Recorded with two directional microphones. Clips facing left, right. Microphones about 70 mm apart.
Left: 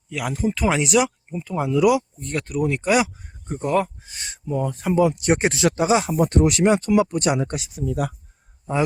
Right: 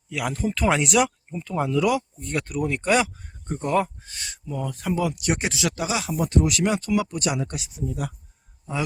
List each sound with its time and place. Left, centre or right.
0.1 s speech: centre
4.2 s speech: left
7.6 s speech: left